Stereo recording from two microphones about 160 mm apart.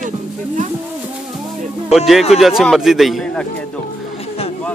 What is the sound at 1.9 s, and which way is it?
A man's voice, centre (ahead or behind).